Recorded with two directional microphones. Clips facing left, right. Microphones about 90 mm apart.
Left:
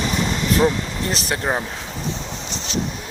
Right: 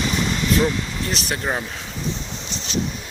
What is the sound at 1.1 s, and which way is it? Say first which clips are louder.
Speech: left 3 dB; 35° left (ahead or behind).